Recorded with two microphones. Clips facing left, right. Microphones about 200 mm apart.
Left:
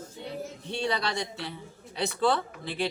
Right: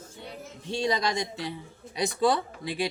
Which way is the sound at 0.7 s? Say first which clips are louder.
Right 3 dB; 15° right (ahead or behind).